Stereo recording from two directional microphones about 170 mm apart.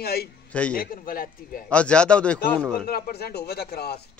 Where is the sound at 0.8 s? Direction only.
60° left (ahead or behind).